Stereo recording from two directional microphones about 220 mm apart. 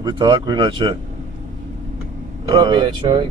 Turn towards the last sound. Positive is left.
turn(degrees=-20)  # may be behind; listen again after turning